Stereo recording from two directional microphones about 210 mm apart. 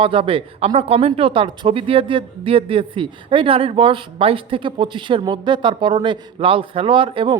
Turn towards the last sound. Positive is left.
turn(degrees=-25)  # may be behind; listen again after turning